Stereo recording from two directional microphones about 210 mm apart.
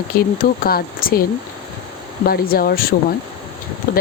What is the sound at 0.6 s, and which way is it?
Speech, 45° left (ahead or behind).